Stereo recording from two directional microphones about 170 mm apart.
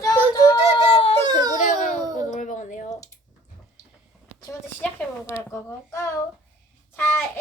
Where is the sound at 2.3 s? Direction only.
50° left (ahead or behind).